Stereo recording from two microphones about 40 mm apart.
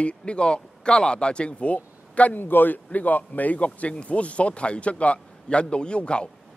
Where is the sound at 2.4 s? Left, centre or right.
Left.